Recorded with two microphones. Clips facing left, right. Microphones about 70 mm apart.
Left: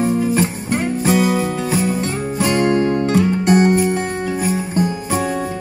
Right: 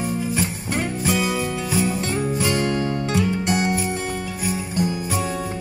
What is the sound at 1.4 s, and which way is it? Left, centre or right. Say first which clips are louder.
Music: left 4 dB; left.